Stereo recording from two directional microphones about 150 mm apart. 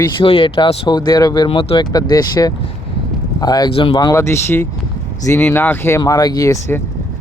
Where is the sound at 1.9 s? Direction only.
25° left (ahead or behind).